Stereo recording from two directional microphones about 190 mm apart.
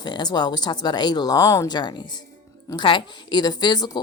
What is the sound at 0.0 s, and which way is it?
Speech, 20° left (ahead or behind).